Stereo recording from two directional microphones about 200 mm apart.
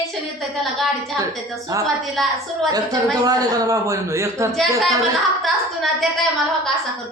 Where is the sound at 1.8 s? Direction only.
Centre (ahead or behind).